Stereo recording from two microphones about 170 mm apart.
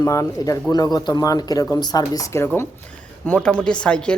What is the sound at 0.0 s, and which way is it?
A woman's voice, 20° left (ahead or behind).